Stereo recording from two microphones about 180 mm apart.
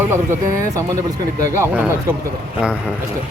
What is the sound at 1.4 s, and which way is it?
Speech, 15° right (ahead or behind).